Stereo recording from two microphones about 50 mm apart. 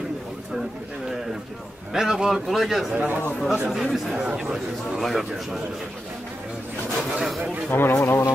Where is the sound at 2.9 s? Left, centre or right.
Right.